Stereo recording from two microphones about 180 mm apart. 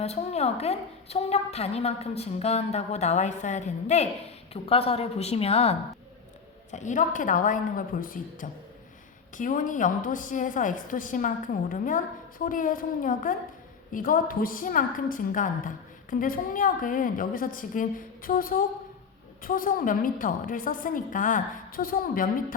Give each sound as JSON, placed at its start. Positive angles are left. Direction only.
{"t": 0.0, "sound": "a woman's voice", "side_deg": 35}